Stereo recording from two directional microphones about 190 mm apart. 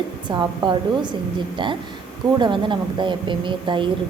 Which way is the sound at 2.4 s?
25° right (ahead or behind).